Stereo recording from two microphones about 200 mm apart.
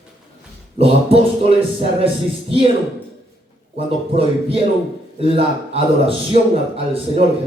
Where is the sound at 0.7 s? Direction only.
30° right (ahead or behind).